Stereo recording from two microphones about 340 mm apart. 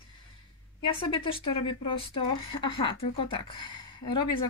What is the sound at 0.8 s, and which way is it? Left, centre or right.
A woman's voice, centre.